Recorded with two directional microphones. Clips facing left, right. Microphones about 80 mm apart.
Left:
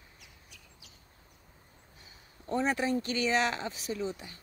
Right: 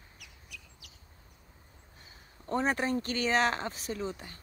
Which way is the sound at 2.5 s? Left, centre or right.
Right.